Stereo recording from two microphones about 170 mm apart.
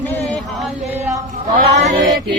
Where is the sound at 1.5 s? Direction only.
50° right (ahead or behind).